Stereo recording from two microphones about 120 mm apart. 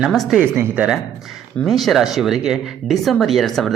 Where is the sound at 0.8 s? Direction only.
5° right (ahead or behind).